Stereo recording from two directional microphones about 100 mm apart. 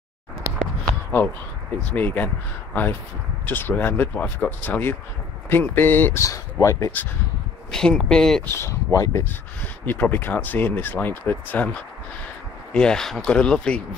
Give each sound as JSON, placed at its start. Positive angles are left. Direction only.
{"t": 0.5, "sound": "a sound", "side_deg": -30}
{"t": 1.8, "sound": "speech", "side_deg": 15}
{"t": 6.2, "sound": "speech", "side_deg": 30}
{"t": 7.7, "sound": "speech", "side_deg": 5}
{"t": 8.5, "sound": "speech", "side_deg": 30}
{"t": 9.8, "sound": "speech", "side_deg": 20}